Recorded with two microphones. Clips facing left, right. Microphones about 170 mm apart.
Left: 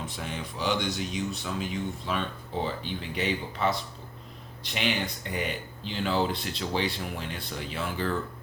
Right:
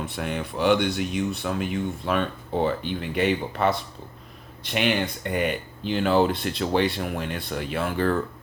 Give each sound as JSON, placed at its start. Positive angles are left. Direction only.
{"t": 0.0, "sound": "speech", "side_deg": -60}